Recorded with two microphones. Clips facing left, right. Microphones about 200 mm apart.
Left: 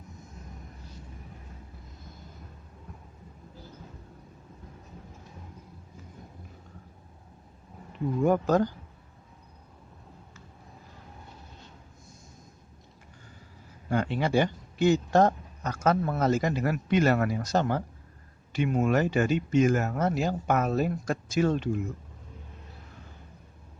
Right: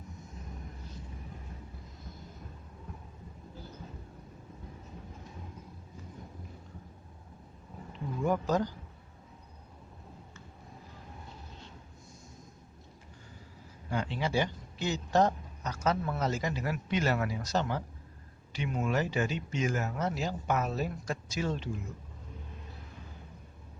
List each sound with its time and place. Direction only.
8.2 s speech: 55° left (ahead or behind)
13.9 s a man's voice: 55° left (ahead or behind)